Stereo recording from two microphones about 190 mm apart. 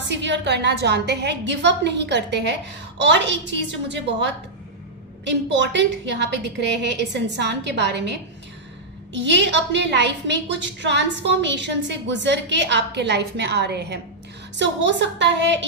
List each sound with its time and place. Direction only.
0.1 s a woman's voice: 70° right (ahead or behind)
9.1 s a woman's voice: 70° right (ahead or behind)